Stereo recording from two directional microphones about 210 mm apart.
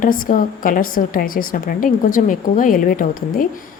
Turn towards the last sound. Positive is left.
turn(degrees=40)  # may be behind; listen again after turning